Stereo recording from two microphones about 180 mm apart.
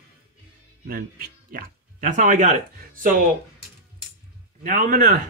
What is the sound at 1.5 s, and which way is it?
Speech, 45° right (ahead or behind).